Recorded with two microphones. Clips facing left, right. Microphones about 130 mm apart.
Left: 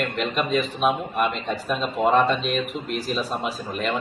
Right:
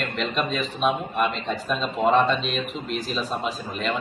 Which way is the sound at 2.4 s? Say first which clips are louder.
Left 3 dB; 50° left (ahead or behind).